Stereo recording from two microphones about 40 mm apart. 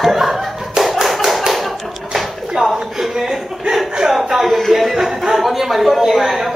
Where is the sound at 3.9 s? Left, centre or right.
Centre.